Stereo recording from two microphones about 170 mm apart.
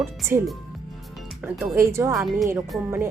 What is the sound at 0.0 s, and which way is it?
Speech, 15° right (ahead or behind).